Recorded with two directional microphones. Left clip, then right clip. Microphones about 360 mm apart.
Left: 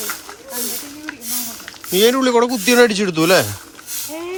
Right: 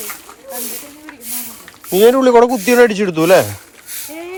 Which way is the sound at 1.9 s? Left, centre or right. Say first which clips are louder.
Right 5 dB; centre.